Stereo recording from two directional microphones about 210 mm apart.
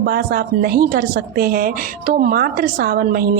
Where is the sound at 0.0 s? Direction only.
45° right (ahead or behind).